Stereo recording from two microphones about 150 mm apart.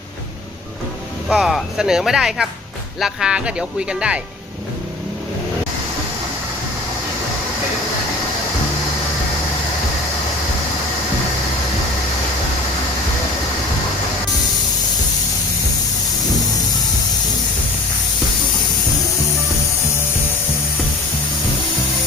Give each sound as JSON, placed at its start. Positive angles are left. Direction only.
{"t": 1.3, "sound": "speech", "side_deg": -5}